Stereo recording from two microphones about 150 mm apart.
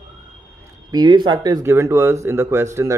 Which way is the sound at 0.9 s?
30° right (ahead or behind).